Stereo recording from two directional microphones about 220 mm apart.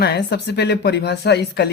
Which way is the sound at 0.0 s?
45° left (ahead or behind).